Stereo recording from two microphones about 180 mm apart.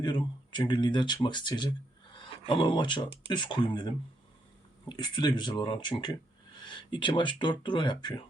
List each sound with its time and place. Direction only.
0.0 s speech: 25° left (ahead or behind)